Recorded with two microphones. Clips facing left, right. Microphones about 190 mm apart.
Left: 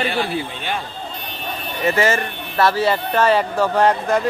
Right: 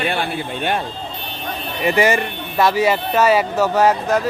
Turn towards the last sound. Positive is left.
turn(degrees=-5)  # may be behind; listen again after turning